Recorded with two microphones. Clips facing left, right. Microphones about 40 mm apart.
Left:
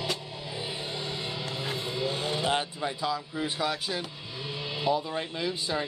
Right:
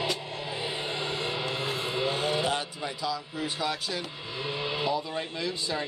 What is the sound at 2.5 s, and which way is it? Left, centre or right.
Speech, left.